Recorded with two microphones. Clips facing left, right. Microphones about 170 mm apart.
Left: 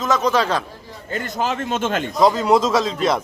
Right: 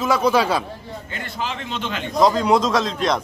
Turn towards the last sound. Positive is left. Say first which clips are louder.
# left 2 dB
turn(degrees=5)  # may be behind; listen again after turning